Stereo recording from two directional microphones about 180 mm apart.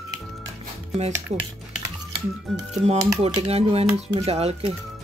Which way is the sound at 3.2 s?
35° right (ahead or behind).